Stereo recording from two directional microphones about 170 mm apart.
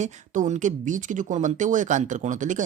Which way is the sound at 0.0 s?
45° right (ahead or behind).